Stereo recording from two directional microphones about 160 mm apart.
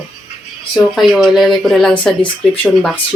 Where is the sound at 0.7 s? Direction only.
Centre (ahead or behind).